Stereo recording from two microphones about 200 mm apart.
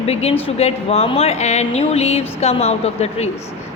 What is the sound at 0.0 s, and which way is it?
A woman's voice, 30° left (ahead or behind).